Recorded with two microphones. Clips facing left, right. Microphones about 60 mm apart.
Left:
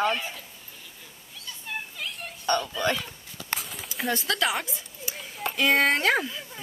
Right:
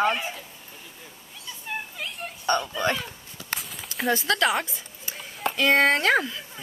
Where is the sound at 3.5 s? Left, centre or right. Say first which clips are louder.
Even; centre.